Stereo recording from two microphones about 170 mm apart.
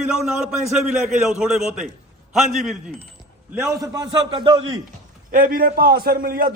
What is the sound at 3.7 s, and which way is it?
A man's voice, 20° right (ahead or behind).